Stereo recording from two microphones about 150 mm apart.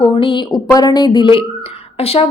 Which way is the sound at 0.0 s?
35° left (ahead or behind).